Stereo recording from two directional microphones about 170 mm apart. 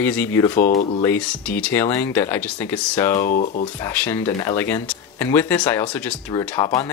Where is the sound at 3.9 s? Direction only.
15° left (ahead or behind).